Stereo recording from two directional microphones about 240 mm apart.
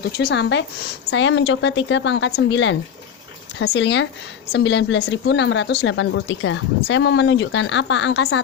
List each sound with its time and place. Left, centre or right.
0.0 s a woman's voice: left